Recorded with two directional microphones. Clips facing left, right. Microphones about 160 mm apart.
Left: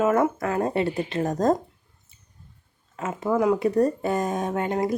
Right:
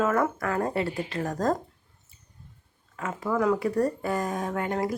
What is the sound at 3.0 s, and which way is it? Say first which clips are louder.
A woman's voice: left 4 dB; 20° left (ahead or behind).